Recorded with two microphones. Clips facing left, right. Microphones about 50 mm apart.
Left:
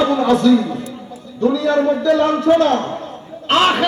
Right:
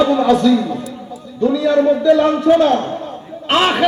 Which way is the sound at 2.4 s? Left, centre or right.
Centre.